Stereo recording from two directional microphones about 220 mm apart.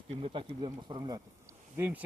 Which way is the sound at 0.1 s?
25° right (ahead or behind).